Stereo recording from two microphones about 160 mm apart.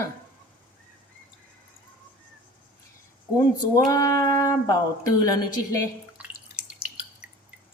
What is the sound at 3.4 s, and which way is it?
Speech, 20° left (ahead or behind).